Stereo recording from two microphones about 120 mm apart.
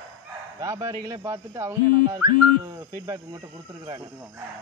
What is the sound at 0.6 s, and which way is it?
Speech, 25° right (ahead or behind).